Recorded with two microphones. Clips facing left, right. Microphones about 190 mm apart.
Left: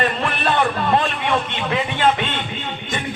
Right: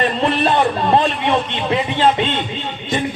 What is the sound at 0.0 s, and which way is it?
A man's voice, 25° right (ahead or behind).